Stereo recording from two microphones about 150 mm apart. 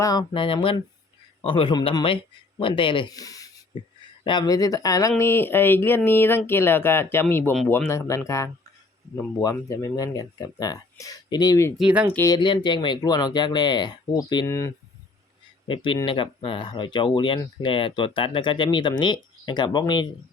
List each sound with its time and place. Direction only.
0.0 s speech: 25° left (ahead or behind)
11.8 s speech: 10° right (ahead or behind)
12.1 s speech: 20° left (ahead or behind)
12.4 s speech: 30° left (ahead or behind)
15.6 s speech: 35° left (ahead or behind)